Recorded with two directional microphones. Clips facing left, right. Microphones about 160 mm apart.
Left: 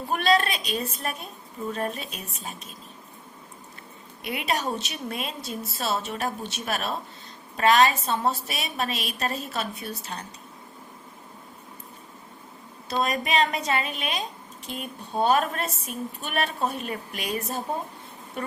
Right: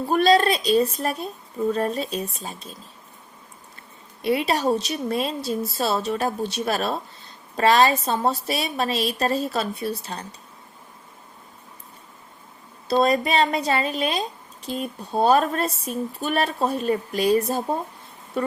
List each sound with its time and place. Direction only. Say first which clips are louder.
0.1 s speech: right 5 dB; 35° right (ahead or behind)
4.2 s speech: right 7 dB; 30° right (ahead or behind)
12.9 s speech: right 6 dB; 35° right (ahead or behind)